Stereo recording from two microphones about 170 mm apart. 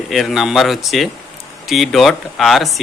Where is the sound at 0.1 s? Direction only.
Centre (ahead or behind).